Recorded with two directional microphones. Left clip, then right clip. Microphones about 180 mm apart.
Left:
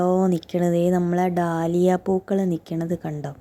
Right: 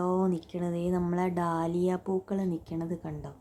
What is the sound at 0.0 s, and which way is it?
A woman's voice, 25° left (ahead or behind).